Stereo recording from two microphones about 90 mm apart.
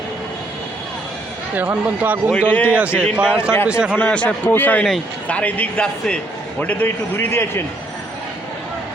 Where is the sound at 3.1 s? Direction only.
10° right (ahead or behind).